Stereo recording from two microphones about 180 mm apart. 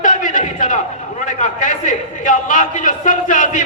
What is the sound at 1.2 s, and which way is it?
A man's voice, 45° left (ahead or behind).